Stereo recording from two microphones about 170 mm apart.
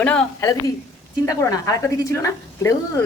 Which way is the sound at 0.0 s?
5° left (ahead or behind).